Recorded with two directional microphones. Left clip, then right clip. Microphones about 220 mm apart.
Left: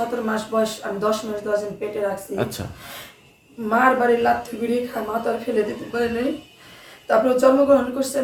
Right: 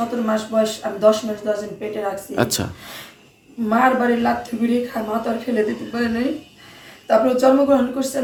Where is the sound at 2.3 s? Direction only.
50° right (ahead or behind).